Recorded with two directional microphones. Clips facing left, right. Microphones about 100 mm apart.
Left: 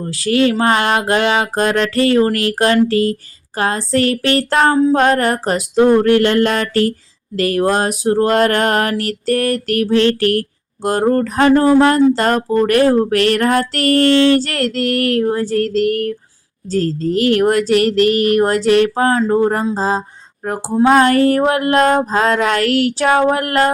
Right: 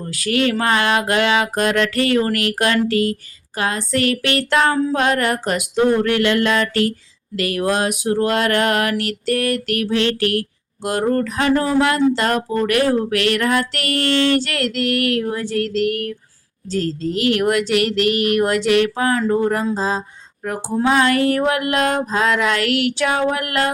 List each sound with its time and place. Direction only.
0.0 s speech: 30° left (ahead or behind)
19.7 s a sound: 40° left (ahead or behind)
20.8 s speech: 40° left (ahead or behind)